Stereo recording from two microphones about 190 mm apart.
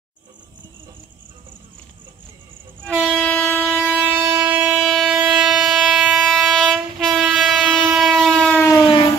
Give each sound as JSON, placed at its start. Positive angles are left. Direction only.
{"t": 3.0, "sound": "train", "side_deg": 0}
{"t": 3.7, "sound": "train", "side_deg": -10}